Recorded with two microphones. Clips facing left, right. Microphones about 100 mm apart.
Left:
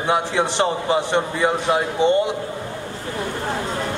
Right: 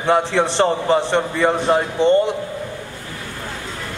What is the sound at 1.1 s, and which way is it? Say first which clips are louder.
A man's voice: right 2 dB; 15° left (ahead or behind).